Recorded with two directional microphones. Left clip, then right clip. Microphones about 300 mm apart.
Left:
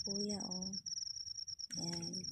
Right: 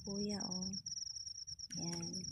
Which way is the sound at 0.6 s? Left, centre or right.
Centre.